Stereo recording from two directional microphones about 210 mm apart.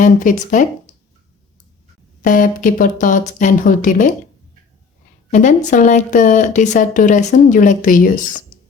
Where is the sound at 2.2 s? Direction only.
40° left (ahead or behind).